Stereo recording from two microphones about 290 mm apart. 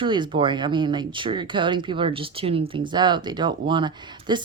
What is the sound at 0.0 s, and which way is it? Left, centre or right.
Speech, centre.